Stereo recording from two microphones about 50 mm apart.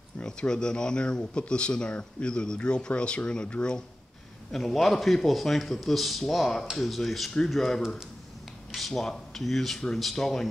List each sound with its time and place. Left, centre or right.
0.2 s speech: centre
4.5 s a man's voice: centre